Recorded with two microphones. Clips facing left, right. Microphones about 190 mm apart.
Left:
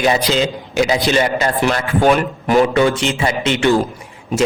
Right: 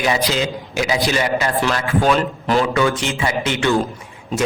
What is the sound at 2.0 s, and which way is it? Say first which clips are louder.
A man's voice: left 4 dB; 15° left (ahead or behind).